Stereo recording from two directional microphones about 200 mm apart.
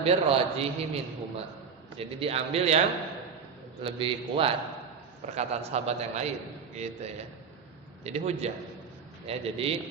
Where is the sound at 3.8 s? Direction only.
25° right (ahead or behind).